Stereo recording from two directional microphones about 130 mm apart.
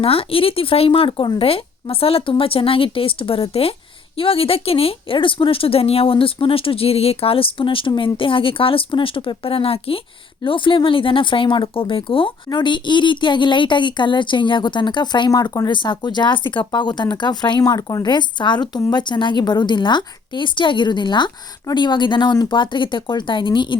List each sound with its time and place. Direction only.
0.0 s a woman's voice: 45° left (ahead or behind)